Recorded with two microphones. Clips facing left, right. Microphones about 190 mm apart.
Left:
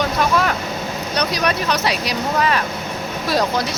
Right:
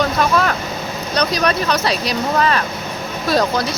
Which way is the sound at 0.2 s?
15° left (ahead or behind).